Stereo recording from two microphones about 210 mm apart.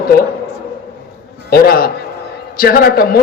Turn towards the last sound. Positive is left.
turn(degrees=45)  # may be behind; listen again after turning